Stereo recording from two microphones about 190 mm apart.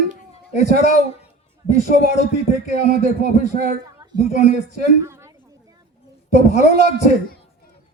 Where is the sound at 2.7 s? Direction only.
50° right (ahead or behind).